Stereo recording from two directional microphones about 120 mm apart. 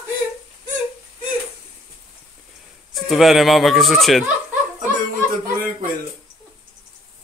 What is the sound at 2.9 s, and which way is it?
Speech, centre (ahead or behind).